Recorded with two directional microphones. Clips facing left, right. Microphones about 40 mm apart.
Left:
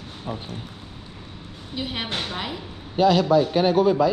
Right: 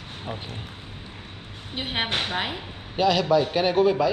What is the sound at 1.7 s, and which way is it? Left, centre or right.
A woman's voice, right.